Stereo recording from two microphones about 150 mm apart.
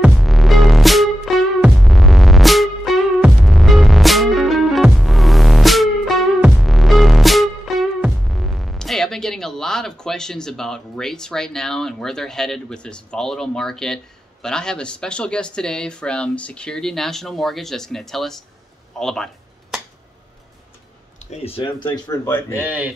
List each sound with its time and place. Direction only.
0.0 s music: centre (ahead or behind)
14.4 s speech: 5° left (ahead or behind)
18.9 s a sound: 5° left (ahead or behind)
21.3 s speech: 40° left (ahead or behind); by 22.6 s 20° left (ahead or behind)
22.6 s speech: 10° right (ahead or behind)